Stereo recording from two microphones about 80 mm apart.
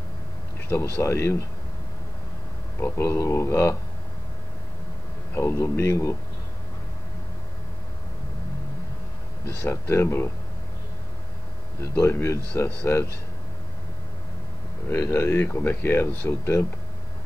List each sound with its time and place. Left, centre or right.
0.7 s speech: left
2.8 s speech: left
5.3 s speech: left
9.6 s speech: left
11.8 s speech: left
14.9 s speech: left